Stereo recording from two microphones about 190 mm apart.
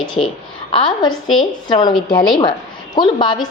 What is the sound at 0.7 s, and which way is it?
A woman's voice, 25° left (ahead or behind).